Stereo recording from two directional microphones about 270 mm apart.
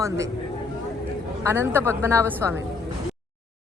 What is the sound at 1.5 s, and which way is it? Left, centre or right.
Speech, centre.